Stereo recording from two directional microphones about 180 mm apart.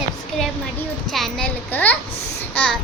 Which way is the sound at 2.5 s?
5° left (ahead or behind).